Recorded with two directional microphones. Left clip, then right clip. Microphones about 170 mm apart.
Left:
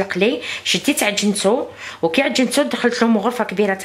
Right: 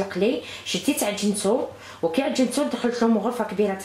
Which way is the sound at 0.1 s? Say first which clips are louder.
Left 5 dB; 20° left (ahead or behind).